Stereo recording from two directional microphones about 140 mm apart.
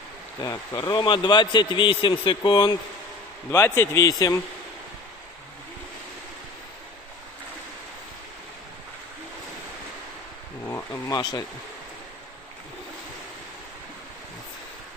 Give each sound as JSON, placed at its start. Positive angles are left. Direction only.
{"t": 0.4, "sound": "speech", "side_deg": 20}
{"t": 1.0, "sound": "a man's voice", "side_deg": 30}
{"t": 3.5, "sound": "a man's voice", "side_deg": 15}
{"t": 10.7, "sound": "speech", "side_deg": 20}